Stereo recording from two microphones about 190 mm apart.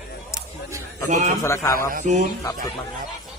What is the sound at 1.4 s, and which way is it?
Speech, 15° left (ahead or behind).